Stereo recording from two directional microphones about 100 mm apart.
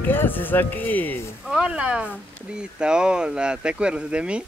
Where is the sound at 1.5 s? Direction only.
10° right (ahead or behind).